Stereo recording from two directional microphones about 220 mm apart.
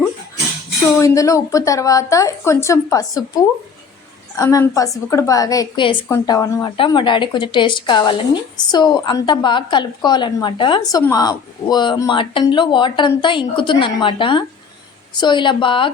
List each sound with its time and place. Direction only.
0.9 s a woman's voice: 15° left (ahead or behind)